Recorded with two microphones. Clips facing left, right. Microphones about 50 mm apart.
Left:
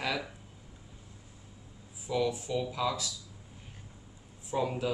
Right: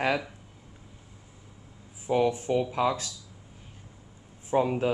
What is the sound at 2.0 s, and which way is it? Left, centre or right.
Speech, right.